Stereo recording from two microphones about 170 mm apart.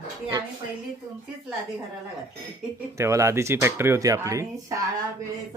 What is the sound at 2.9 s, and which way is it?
Speech, 15° right (ahead or behind).